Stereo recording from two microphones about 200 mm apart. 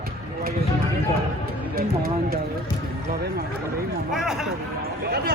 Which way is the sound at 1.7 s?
45° right (ahead or behind).